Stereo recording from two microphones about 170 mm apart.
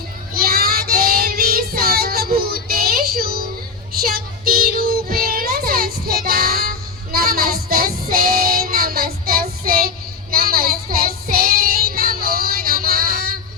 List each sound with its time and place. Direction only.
0.3 s child singing: 60° right (ahead or behind)